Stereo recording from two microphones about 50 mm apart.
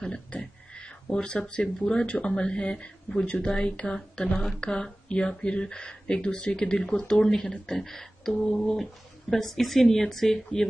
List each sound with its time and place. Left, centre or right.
0.3 s speech: left; by 10.7 s centre